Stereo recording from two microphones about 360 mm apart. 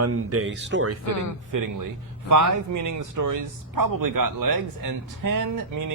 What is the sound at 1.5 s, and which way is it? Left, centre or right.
A man's voice, right.